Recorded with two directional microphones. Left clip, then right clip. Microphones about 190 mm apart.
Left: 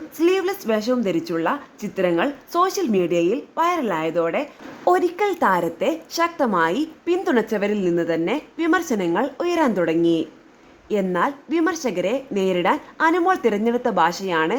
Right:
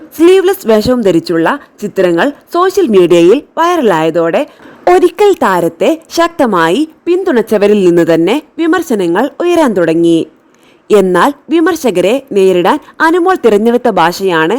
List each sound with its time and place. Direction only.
0.2 s a woman's voice: 45° right (ahead or behind)
8.5 s a woman's voice: 40° right (ahead or behind)